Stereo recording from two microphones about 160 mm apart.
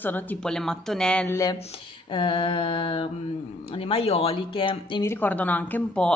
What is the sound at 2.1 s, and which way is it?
Speech, 30° left (ahead or behind).